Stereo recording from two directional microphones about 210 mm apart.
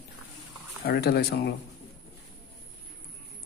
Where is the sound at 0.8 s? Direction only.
45° left (ahead or behind).